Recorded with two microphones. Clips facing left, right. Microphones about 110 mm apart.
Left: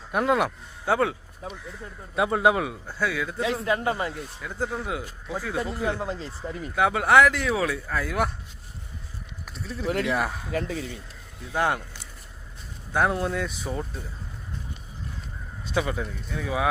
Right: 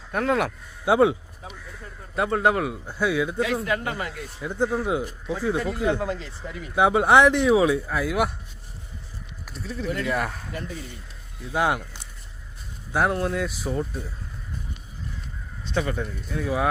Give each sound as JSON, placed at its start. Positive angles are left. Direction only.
{"t": 0.1, "sound": "speech", "side_deg": 5}
{"t": 0.9, "sound": "speech", "side_deg": -15}
{"t": 2.1, "sound": "speech", "side_deg": 5}
{"t": 2.8, "sound": "speech", "side_deg": -15}
{"t": 3.7, "sound": "speech", "side_deg": 25}
{"t": 4.4, "sound": "speech", "side_deg": -25}
{"t": 6.0, "sound": "speech", "side_deg": 30}
{"t": 6.7, "sound": "speech", "side_deg": -20}
{"t": 9.5, "sound": "speech", "side_deg": 0}
{"t": 9.8, "sound": "speech", "side_deg": 90}
{"t": 10.1, "sound": "speech", "side_deg": 5}
{"t": 10.5, "sound": "speech", "side_deg": 90}
{"t": 11.5, "sound": "speech", "side_deg": -10}
{"t": 15.6, "sound": "speech", "side_deg": 5}